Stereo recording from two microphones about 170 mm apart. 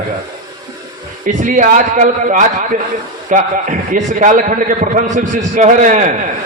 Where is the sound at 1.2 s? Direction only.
50° right (ahead or behind).